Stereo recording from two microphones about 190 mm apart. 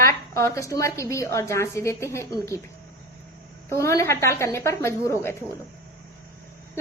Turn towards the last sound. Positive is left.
turn(degrees=15)  # may be behind; listen again after turning